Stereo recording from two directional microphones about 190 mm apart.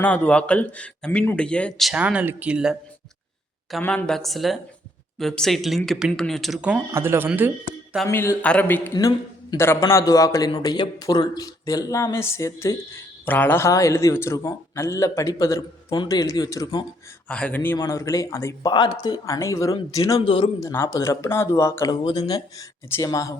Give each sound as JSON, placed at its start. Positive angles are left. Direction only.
{"t": 0.0, "sound": "a man's voice", "side_deg": 10}
{"t": 8.0, "sound": "a man's voice", "side_deg": 15}
{"t": 17.2, "sound": "a man's voice", "side_deg": 5}
{"t": 20.1, "sound": "speech", "side_deg": 30}
{"t": 20.6, "sound": "a man's voice", "side_deg": 15}